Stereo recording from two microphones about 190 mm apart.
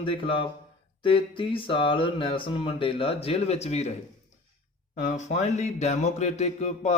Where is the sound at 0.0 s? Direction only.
30° left (ahead or behind).